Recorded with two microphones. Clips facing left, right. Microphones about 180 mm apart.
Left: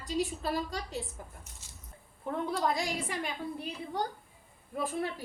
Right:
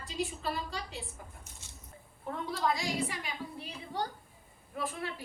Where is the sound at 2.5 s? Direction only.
50° left (ahead or behind).